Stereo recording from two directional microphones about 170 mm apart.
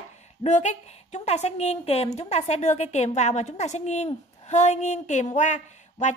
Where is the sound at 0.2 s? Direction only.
40° left (ahead or behind).